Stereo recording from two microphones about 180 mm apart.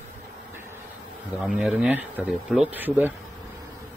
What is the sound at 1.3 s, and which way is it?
Speech, 5° right (ahead or behind).